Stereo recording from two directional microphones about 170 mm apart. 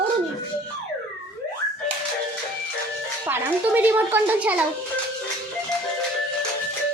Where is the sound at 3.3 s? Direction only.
10° right (ahead or behind).